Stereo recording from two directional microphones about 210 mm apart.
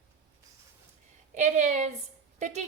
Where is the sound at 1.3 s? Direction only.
35° right (ahead or behind).